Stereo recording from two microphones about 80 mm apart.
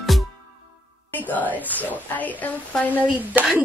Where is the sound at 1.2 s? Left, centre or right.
Left.